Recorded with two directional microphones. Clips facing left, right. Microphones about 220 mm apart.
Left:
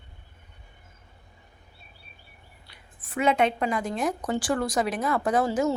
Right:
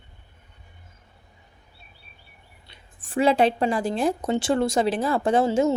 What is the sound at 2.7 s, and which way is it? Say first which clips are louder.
A woman's voice: right 7 dB; 30° right (ahead or behind).